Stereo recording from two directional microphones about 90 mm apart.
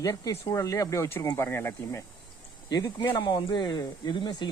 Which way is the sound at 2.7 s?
50° left (ahead or behind).